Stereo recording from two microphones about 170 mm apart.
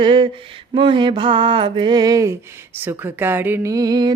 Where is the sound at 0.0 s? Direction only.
30° right (ahead or behind).